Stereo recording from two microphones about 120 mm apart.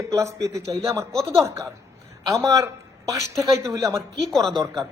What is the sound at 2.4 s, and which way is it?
Speech, 30° right (ahead or behind).